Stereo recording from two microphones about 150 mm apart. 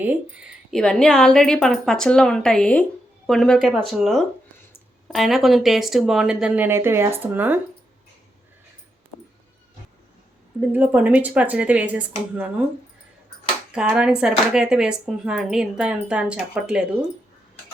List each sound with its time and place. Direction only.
0.0 s speech: 10° right (ahead or behind)
0.8 s speech: 5° left (ahead or behind)
6.7 s speech: 15° right (ahead or behind)
10.7 s speech: 10° right (ahead or behind)
13.7 s speech: 5° right (ahead or behind)